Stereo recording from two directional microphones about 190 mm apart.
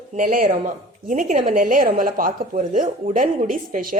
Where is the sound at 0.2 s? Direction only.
45° right (ahead or behind).